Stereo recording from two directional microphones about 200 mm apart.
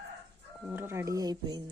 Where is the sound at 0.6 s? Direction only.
10° right (ahead or behind).